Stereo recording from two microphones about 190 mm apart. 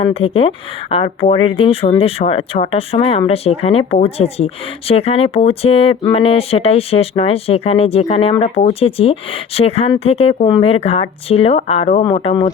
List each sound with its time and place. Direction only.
0.0 s speech: 30° left (ahead or behind)